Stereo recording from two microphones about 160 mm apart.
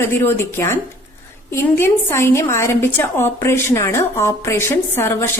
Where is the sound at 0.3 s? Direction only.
15° left (ahead or behind).